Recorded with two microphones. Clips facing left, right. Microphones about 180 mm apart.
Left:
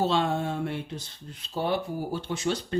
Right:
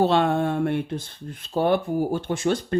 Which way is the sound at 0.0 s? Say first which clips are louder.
Right 6 dB; 60° right (ahead or behind).